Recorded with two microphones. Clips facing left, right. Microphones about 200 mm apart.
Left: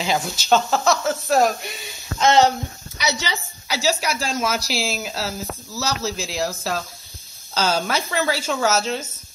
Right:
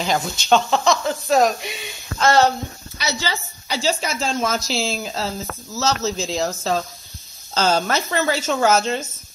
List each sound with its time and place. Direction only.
0.0 s speech: 5° left (ahead or behind)
2.1 s a woman's voice: 15° left (ahead or behind)